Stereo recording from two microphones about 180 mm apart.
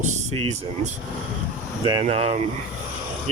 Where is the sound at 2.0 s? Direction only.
40° right (ahead or behind).